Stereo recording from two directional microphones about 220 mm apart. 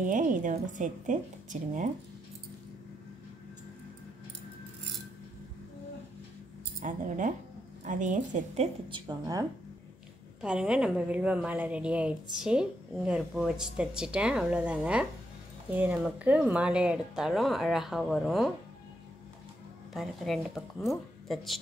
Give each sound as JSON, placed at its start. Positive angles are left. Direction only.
{"t": 0.0, "sound": "speech", "side_deg": -35}
{"t": 6.8, "sound": "speech", "side_deg": -35}
{"t": 8.9, "sound": "speech", "side_deg": -15}
{"t": 10.4, "sound": "speech", "side_deg": -5}
{"t": 19.9, "sound": "speech", "side_deg": 0}